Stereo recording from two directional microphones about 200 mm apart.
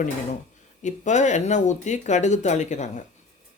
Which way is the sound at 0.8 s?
35° left (ahead or behind).